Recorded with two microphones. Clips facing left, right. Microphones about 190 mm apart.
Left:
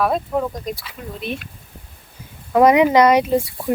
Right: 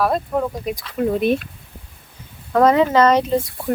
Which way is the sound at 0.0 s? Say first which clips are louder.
Even; centre (ahead or behind).